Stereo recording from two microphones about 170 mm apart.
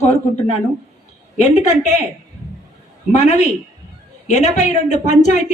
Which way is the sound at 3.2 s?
40° left (ahead or behind).